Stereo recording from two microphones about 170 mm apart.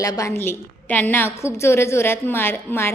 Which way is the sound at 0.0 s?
20° left (ahead or behind).